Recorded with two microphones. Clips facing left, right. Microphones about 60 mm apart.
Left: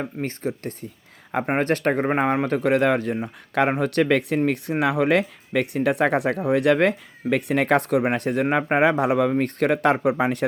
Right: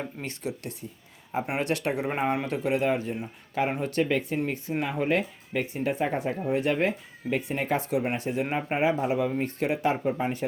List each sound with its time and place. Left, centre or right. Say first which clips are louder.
0.2 s speech: left 7 dB; left